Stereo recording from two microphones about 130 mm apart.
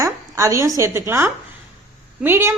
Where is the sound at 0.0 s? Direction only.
25° right (ahead or behind).